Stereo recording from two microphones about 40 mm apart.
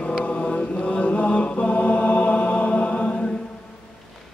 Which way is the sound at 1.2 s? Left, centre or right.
Left.